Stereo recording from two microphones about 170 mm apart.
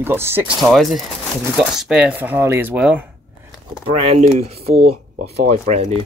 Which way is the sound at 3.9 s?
40° right (ahead or behind).